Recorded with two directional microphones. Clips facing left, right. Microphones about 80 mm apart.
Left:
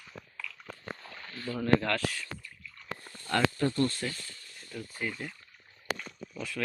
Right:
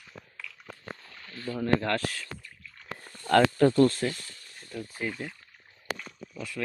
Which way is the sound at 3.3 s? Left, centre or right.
Right.